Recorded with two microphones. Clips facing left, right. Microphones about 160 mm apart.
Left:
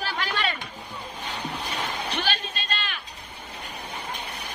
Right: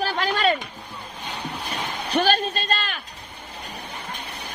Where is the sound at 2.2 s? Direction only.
45° right (ahead or behind).